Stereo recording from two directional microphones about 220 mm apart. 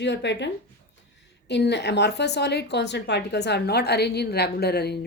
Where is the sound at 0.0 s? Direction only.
50° left (ahead or behind).